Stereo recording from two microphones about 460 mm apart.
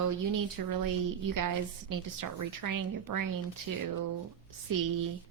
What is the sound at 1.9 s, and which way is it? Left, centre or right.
Speech, right.